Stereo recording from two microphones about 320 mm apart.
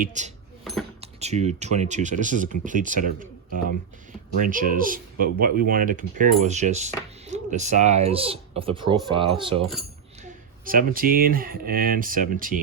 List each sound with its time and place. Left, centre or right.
0.0 s speech: right
0.6 s a sound: centre
1.0 s speech: centre
10.7 s speech: right